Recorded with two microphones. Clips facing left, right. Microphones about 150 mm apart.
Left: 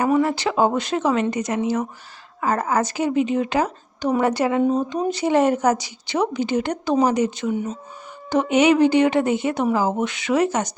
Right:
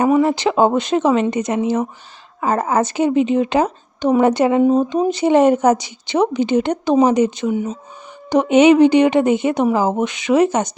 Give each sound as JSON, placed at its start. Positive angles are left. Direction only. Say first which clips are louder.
{"t": 0.2, "sound": "speech", "louder": "right 4 dB", "side_deg": -20}